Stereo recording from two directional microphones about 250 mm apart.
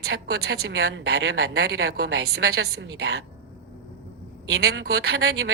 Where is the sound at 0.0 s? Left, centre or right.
Right.